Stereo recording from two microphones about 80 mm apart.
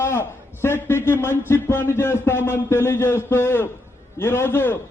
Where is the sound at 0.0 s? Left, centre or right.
Left.